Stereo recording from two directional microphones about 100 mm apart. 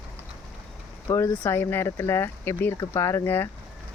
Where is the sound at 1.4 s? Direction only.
20° left (ahead or behind).